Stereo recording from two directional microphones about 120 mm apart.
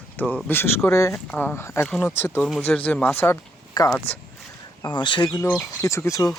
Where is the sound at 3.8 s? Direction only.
35° left (ahead or behind).